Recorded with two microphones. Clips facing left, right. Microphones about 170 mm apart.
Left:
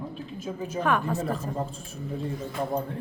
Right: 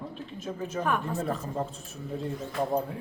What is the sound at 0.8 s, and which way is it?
Speech, 90° left.